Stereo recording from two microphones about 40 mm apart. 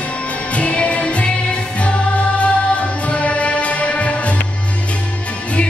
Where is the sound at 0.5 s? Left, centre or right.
Left.